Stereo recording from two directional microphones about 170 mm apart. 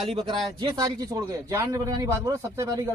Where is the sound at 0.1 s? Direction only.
30° right (ahead or behind).